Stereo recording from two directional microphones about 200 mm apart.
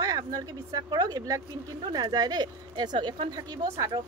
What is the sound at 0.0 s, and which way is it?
Speech, 15° right (ahead or behind).